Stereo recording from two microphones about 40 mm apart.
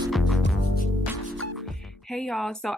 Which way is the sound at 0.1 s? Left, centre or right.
Centre.